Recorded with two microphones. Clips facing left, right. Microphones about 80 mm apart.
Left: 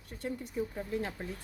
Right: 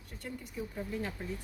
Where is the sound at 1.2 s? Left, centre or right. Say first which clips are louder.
Even; left.